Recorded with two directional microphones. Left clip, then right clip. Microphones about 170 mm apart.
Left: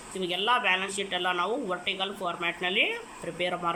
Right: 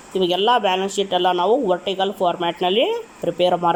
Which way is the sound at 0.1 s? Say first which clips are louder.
Right 10 dB; 40° right (ahead or behind).